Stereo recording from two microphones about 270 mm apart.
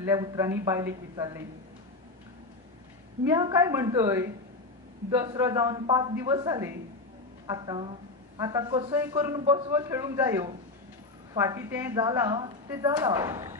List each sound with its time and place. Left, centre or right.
0.0 s a woman's voice: centre
3.3 s a woman's voice: centre